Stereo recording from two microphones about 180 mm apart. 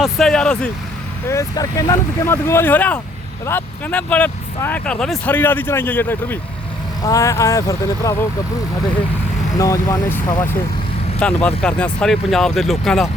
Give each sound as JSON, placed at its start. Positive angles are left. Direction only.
{"t": 0.0, "sound": "speech", "side_deg": 0}
{"t": 1.3, "sound": "speech", "side_deg": 15}
{"t": 9.6, "sound": "speech", "side_deg": 20}
{"t": 11.2, "sound": "speech", "side_deg": 10}